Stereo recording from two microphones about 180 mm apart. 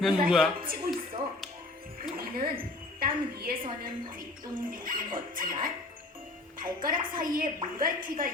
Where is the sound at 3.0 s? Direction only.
55° right (ahead or behind).